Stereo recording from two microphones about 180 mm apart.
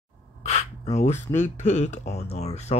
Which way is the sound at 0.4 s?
40° left (ahead or behind).